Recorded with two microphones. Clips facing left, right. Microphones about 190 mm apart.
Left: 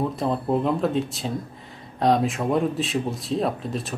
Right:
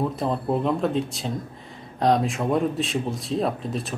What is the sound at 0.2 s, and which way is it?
Speech, centre (ahead or behind).